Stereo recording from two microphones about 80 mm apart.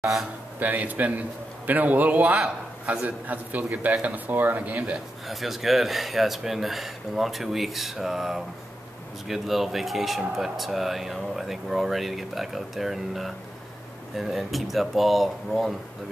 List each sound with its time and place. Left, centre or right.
0.0 s speech: centre
0.6 s a man's voice: right
5.3 s speech: centre